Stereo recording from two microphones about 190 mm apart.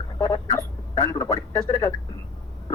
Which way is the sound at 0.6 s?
15° left (ahead or behind).